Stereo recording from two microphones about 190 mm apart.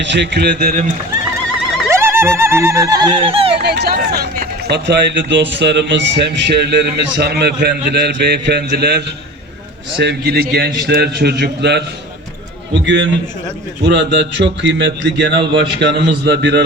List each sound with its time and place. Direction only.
0.0 s a man's voice: 65° right (ahead or behind); by 0.9 s 50° right (ahead or behind)
1.9 s turkey: 15° right (ahead or behind); by 3.5 s 30° right (ahead or behind)
3.6 s a man's voice: 60° right (ahead or behind)
12.8 s a man's voice: 70° right (ahead or behind)